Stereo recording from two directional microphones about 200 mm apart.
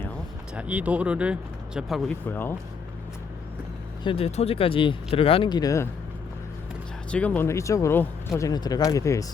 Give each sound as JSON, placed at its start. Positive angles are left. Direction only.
{"t": 0.5, "sound": "speech", "side_deg": -5}
{"t": 4.0, "sound": "speech", "side_deg": 30}
{"t": 7.1, "sound": "speech", "side_deg": 5}